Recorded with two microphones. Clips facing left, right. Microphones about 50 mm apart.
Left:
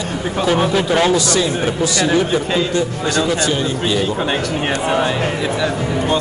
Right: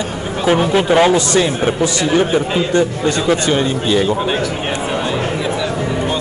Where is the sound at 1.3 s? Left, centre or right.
Right.